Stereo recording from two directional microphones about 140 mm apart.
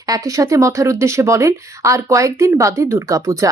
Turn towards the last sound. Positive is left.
turn(degrees=-25)  # may be behind; listen again after turning